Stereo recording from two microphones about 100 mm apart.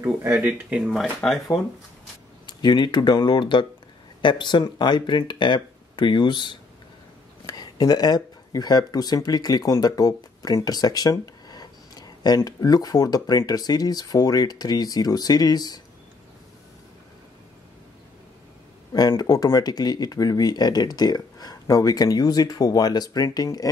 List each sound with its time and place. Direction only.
0.3 s speech: 10° right (ahead or behind)
0.9 s speech: centre (ahead or behind)
2.4 s speech: 50° left (ahead or behind)
18.9 s speech: 40° left (ahead or behind)